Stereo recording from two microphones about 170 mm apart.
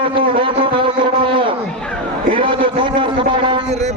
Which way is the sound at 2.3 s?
30° right (ahead or behind).